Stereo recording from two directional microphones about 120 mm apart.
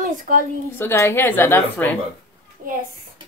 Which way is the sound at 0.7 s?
20° left (ahead or behind).